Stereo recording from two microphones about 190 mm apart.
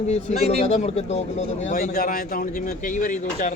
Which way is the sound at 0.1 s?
35° left (ahead or behind).